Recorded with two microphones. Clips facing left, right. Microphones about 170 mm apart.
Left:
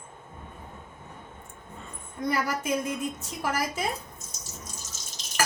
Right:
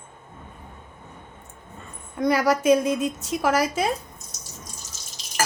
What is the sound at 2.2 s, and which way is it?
A woman's voice, 85° right.